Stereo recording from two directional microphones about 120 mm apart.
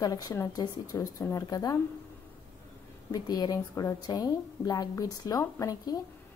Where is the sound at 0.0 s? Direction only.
30° left (ahead or behind).